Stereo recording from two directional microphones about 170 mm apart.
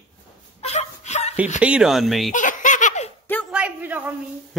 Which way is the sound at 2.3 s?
50° left (ahead or behind).